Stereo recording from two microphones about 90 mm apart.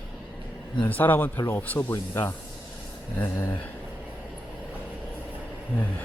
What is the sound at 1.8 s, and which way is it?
Speech, 35° left (ahead or behind).